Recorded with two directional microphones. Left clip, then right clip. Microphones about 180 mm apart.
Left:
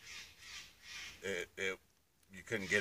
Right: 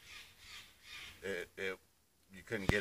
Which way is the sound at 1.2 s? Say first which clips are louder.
Left 1 dB; 10° left (ahead or behind).